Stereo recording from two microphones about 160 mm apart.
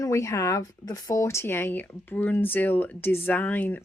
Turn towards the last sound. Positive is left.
turn(degrees=10)  # may be behind; listen again after turning